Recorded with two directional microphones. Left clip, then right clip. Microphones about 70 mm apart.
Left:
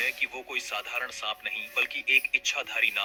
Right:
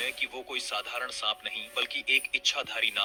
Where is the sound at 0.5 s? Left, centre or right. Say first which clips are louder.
Left 1 dB; centre.